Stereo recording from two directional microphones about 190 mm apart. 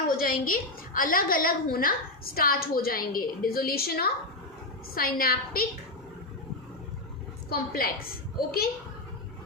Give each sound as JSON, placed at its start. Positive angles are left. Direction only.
{"t": 0.2, "sound": "a woman's voice", "side_deg": 50}
{"t": 7.5, "sound": "a woman's voice", "side_deg": 50}